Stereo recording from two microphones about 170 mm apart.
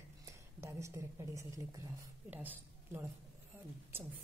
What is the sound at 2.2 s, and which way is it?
Speech, 10° right (ahead or behind).